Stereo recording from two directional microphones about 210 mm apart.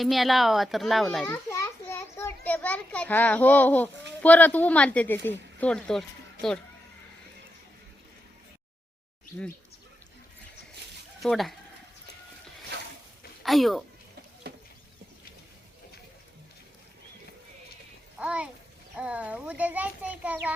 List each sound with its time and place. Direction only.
0.0 s a child's voice: centre (ahead or behind)
1.3 s a child's voice: 10° left (ahead or behind)
11.2 s a child's voice: centre (ahead or behind)
13.4 s speech: centre (ahead or behind)
14.5 s a sound: 50° right (ahead or behind)
18.2 s a child's voice: 5° right (ahead or behind)